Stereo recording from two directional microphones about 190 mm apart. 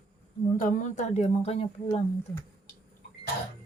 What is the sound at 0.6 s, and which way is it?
A woman's voice, 45° left (ahead or behind).